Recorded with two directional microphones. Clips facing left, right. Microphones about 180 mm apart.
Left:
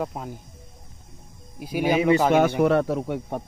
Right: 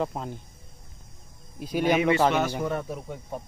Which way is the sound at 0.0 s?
5° left (ahead or behind).